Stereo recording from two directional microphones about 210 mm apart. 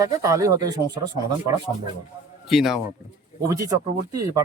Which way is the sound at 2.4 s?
Centre (ahead or behind).